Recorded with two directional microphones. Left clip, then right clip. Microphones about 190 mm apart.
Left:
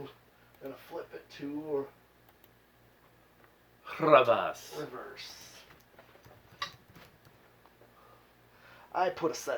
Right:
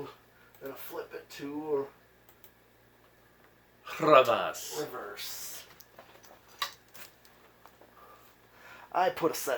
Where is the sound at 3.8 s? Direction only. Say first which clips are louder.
Right 1 dB; 35° left (ahead or behind).